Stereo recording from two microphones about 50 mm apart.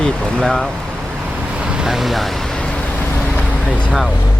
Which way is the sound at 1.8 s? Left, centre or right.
Centre.